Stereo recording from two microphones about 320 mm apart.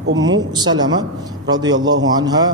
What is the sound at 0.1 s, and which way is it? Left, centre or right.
Speech, right.